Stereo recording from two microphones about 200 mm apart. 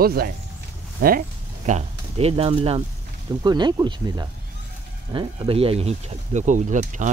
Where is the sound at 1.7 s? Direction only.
30° right (ahead or behind).